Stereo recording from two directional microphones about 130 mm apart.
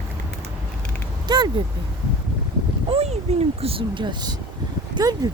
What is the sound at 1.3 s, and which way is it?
Speech, 35° right (ahead or behind).